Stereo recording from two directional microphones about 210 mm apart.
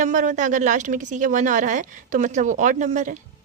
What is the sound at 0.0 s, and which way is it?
A woman's voice, 35° right (ahead or behind).